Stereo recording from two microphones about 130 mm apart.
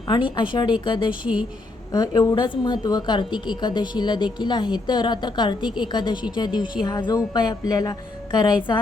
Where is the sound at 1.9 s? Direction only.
30° left (ahead or behind).